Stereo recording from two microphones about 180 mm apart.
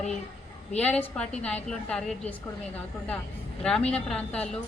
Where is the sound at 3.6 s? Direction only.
5° left (ahead or behind).